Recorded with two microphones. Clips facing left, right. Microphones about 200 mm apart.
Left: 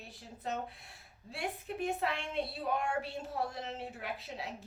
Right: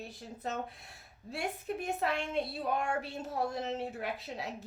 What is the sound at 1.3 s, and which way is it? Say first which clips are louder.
A woman's voice: right 3 dB; 45° right (ahead or behind).